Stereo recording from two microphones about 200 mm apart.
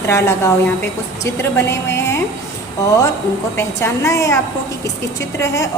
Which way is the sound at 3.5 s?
15° left (ahead or behind).